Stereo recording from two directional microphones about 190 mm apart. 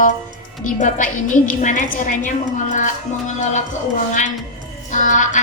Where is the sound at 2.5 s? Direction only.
40° left (ahead or behind).